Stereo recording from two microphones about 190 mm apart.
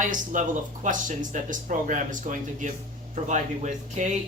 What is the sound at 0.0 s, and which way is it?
Speech, 40° right (ahead or behind).